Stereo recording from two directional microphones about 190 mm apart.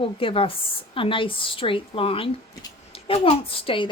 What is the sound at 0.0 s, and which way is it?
Speech, 30° left (ahead or behind).